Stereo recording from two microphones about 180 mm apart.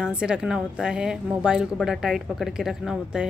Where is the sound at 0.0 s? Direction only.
5° right (ahead or behind).